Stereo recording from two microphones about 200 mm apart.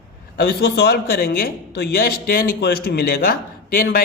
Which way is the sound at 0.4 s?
55° left (ahead or behind).